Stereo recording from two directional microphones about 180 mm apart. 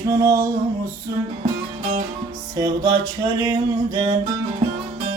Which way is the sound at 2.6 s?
20° right (ahead or behind).